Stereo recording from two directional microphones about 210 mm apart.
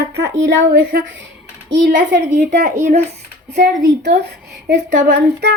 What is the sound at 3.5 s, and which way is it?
A woman's voice, 50° right (ahead or behind).